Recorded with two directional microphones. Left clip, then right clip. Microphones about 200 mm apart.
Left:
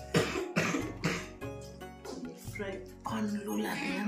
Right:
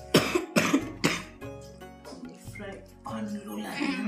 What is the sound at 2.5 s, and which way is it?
Music, 10° left (ahead or behind).